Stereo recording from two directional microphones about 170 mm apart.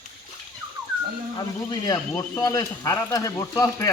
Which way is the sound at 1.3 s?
25° left (ahead or behind).